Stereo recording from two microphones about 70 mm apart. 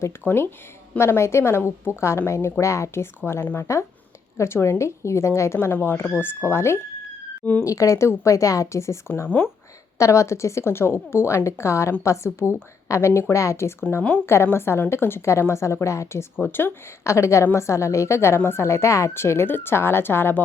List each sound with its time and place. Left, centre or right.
0.2 s speech: right
0.9 s a woman's voice: left
7.6 s a woman's voice: left
9.2 s a woman's voice: left
10.0 s a woman's voice: left
16.4 s a woman's voice: left
17.0 s a woman's voice: left